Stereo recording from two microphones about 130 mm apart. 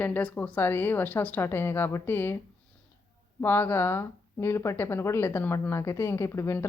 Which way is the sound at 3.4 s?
15° left (ahead or behind).